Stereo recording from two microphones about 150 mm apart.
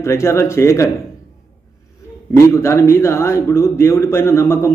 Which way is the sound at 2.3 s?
20° left (ahead or behind).